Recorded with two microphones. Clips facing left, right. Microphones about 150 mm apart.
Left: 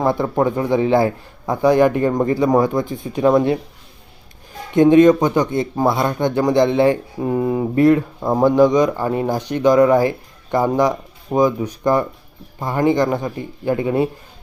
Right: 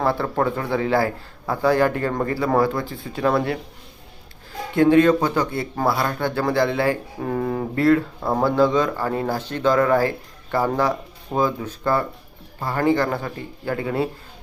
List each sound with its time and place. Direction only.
0.0 s speech: 15° left (ahead or behind)
4.7 s speech: 20° left (ahead or behind)